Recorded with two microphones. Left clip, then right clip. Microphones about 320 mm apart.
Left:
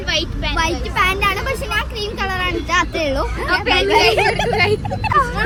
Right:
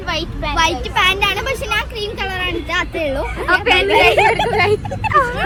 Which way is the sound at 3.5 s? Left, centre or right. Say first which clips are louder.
Right 3 dB; centre.